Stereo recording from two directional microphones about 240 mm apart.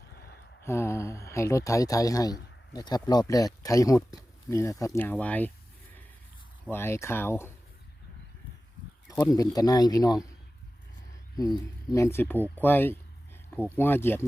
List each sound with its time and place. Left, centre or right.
0.6 s speech: centre
6.7 s speech: centre
9.0 s speech: centre
11.3 s speech: centre